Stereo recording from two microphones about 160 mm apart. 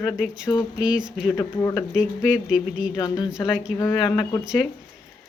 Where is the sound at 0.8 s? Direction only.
5° right (ahead or behind).